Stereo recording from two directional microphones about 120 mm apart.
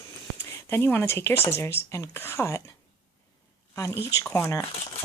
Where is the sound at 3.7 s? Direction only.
25° left (ahead or behind).